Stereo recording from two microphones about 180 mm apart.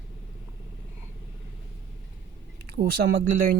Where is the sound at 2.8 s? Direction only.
60° right (ahead or behind).